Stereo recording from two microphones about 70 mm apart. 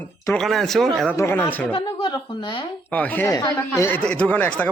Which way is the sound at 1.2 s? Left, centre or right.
Left.